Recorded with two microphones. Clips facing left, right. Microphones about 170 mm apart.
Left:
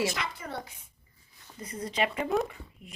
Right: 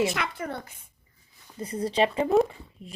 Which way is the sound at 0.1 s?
60° right (ahead or behind).